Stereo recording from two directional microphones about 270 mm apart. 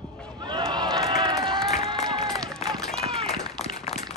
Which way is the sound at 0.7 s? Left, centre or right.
Centre.